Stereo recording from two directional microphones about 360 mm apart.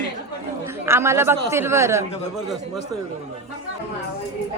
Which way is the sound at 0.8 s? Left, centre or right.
Centre.